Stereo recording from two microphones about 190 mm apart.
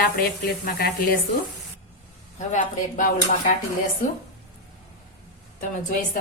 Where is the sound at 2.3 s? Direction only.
40° left (ahead or behind).